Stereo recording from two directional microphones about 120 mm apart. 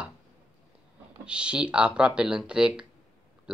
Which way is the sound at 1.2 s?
10° right (ahead or behind).